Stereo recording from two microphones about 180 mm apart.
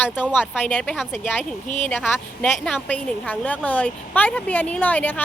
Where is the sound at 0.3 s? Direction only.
10° left (ahead or behind).